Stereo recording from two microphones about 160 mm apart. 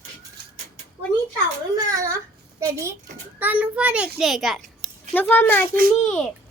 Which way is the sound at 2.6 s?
20° right (ahead or behind).